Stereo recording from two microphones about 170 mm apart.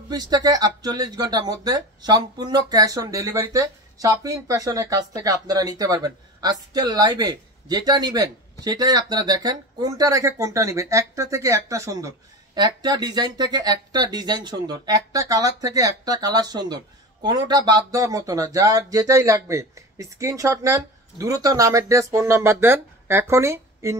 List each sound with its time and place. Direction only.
0.1 s speech: 25° right (ahead or behind)